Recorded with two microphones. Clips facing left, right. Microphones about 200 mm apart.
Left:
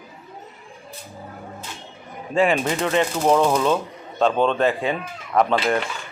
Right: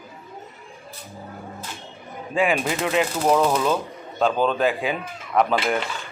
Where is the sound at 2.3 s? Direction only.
5° right (ahead or behind).